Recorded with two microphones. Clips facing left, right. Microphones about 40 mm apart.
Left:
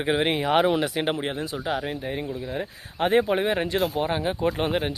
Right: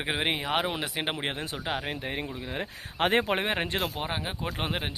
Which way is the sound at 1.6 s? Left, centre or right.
Right.